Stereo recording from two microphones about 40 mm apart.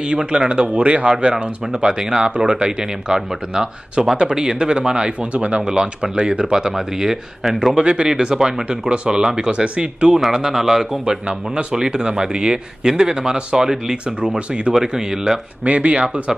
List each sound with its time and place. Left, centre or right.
0.0 s speech: right
1.1 s a man's voice: centre
7.7 s a man's voice: right
11.2 s a man's voice: centre
14.7 s a man's voice: centre
15.6 s speech: right